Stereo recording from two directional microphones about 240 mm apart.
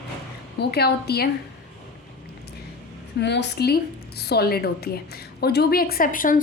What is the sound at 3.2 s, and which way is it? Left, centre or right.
A woman's voice, left.